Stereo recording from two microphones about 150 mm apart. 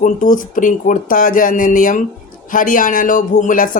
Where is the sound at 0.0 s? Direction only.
60° left (ahead or behind).